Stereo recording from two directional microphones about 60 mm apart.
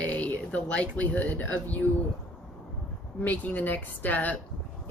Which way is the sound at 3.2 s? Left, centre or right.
Left.